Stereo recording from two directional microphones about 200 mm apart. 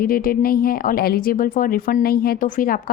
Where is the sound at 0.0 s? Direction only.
45° left (ahead or behind).